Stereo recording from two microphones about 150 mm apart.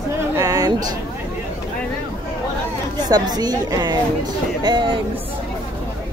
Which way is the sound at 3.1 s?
25° right (ahead or behind).